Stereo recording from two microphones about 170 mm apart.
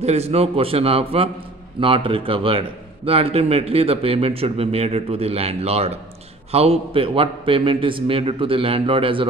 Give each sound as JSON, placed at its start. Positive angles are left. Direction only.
{"t": 0.0, "sound": "speech", "side_deg": -40}